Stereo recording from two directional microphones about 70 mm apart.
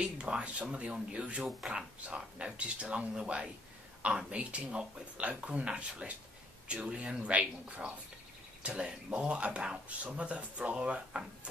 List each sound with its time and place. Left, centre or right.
0.0 s speech: centre